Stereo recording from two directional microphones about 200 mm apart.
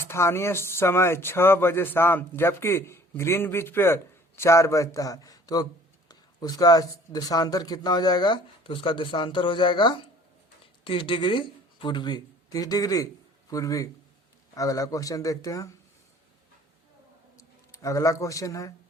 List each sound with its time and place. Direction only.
0.0 s speech: 15° left (ahead or behind)
17.8 s speech: 15° left (ahead or behind)